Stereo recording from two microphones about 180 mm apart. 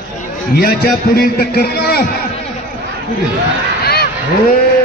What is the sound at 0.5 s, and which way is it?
A man's voice, 60° left (ahead or behind).